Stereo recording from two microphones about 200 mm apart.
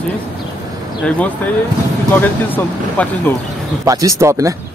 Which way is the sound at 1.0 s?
5° left (ahead or behind).